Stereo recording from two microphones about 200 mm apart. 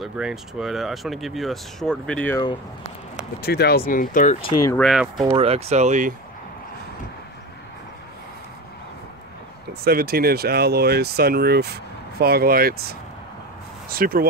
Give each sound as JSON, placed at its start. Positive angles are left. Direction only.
{"t": 0.0, "sound": "speech", "side_deg": 0}
{"t": 3.4, "sound": "speech", "side_deg": 50}
{"t": 4.7, "sound": "speech", "side_deg": 0}
{"t": 5.2, "sound": "speech", "side_deg": -30}
{"t": 9.8, "sound": "speech", "side_deg": -50}